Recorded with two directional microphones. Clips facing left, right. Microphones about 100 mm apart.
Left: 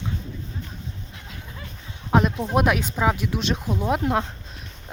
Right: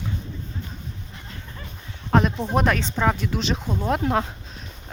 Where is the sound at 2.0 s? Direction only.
5° left (ahead or behind).